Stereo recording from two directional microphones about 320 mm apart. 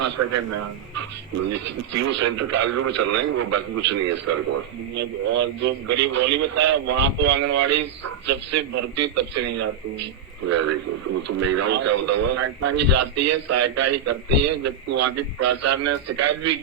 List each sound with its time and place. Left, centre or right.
0.0 s speech: right
5.9 s a man's voice: right